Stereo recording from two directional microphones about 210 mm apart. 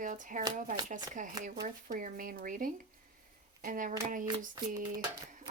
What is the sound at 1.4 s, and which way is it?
Speech, 40° right (ahead or behind).